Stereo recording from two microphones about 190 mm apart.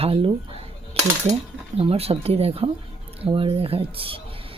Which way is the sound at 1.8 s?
30° right (ahead or behind).